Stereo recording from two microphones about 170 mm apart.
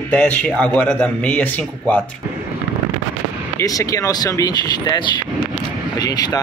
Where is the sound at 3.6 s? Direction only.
20° left (ahead or behind).